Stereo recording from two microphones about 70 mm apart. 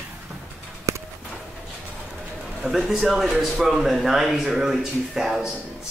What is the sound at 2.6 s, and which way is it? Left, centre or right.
Speech, centre.